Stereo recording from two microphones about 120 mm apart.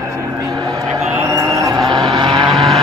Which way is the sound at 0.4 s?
35° right (ahead or behind).